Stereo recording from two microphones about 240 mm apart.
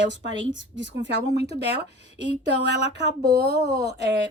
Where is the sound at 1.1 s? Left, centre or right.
Right.